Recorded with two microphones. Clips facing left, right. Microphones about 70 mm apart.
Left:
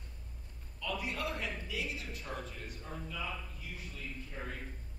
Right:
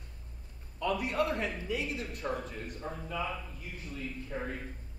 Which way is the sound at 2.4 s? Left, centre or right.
Right.